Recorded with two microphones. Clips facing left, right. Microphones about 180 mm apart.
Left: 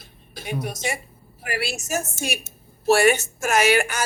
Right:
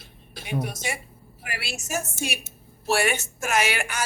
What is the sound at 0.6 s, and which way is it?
A woman's voice, 45° left (ahead or behind).